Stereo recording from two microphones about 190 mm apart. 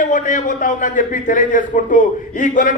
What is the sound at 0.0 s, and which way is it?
A man's voice, 45° left (ahead or behind).